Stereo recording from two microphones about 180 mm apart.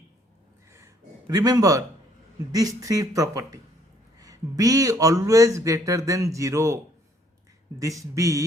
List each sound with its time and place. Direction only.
0.7 s a sound: 15° right (ahead or behind)
2.5 s speech: 20° right (ahead or behind)
7.8 s speech: 20° right (ahead or behind)